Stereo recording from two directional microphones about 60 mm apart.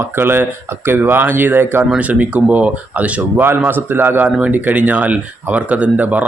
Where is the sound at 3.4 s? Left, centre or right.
Right.